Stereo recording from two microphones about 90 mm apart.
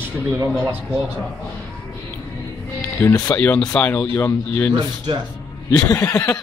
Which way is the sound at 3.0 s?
25° left (ahead or behind).